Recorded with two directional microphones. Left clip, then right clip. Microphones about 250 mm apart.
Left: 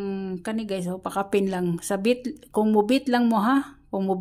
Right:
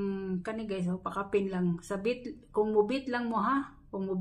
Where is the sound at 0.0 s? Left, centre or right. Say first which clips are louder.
Left 4 dB; left.